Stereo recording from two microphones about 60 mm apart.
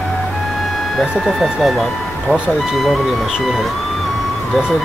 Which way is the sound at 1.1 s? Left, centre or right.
Centre.